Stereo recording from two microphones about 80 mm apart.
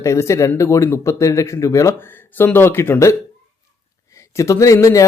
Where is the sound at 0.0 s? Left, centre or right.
Left.